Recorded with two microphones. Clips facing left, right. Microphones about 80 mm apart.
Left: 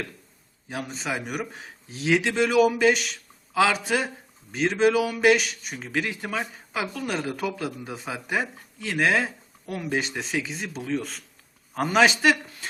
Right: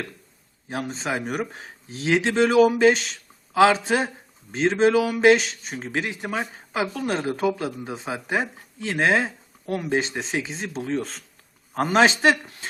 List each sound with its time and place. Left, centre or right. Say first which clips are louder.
0.7 s a man's voice: right 3 dB; right